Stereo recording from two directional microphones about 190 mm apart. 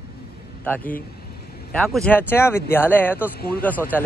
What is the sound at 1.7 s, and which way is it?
Speech, 5° left (ahead or behind).